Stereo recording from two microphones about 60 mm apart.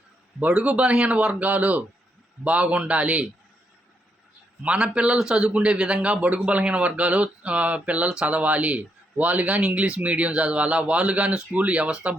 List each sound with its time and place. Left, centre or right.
0.3 s a man's voice: right
4.6 s a man's voice: centre